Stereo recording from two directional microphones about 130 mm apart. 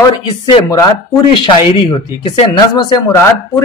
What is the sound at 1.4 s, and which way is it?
Speech, 40° left (ahead or behind).